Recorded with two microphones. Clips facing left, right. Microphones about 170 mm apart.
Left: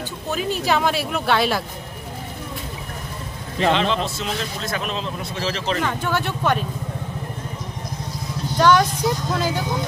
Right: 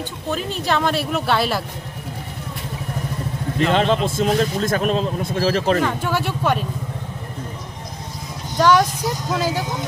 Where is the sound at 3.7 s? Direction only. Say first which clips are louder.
Right 4 dB; 45° right (ahead or behind).